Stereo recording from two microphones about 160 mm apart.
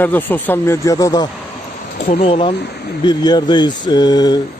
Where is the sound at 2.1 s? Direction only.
40° left (ahead or behind).